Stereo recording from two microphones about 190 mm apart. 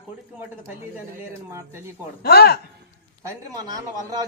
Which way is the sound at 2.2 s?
55° left (ahead or behind).